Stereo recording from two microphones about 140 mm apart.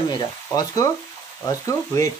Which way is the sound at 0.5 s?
25° left (ahead or behind).